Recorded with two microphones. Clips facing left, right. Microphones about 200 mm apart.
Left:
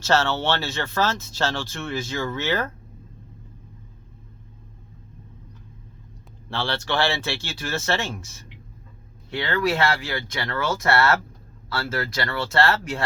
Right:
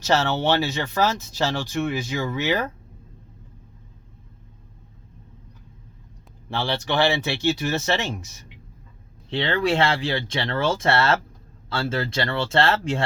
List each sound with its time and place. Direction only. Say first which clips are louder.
0.0 s speech: right 1 dB; 15° right (ahead or behind)
6.5 s speech: right 1 dB; 15° right (ahead or behind)